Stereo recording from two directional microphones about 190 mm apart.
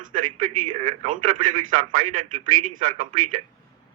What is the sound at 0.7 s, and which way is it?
A man's voice, 30° right (ahead or behind).